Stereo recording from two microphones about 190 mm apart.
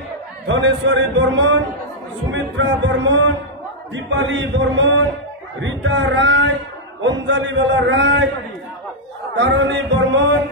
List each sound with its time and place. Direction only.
0.5 s a man's voice: 80° right
9.3 s a man's voice: 70° right (ahead or behind)